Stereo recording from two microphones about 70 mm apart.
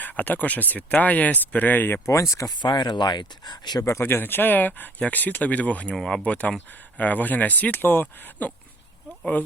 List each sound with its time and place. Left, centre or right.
0.0 s speech: left
2.0 s speech: left
2.6 s speech: left
4.0 s speech: left
6.0 s speech: centre
6.2 s speech: centre